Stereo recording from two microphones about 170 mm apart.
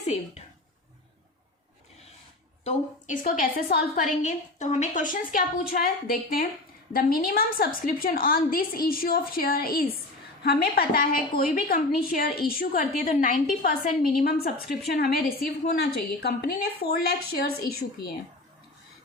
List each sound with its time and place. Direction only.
0.0 s a woman's voice: 40° left (ahead or behind)
2.6 s a woman's voice: 50° left (ahead or behind)
6.9 s a woman's voice: 60° left (ahead or behind)
15.4 s a woman's voice: 75° left (ahead or behind)